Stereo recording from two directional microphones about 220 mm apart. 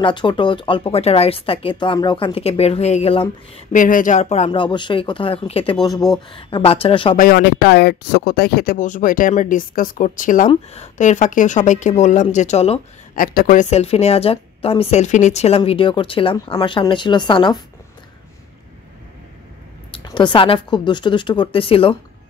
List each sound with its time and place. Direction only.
0.0 s speech: 20° left (ahead or behind)
7.2 s speech: 45° left (ahead or behind); by 17.6 s 20° left (ahead or behind)
19.9 s speech: 20° left (ahead or behind)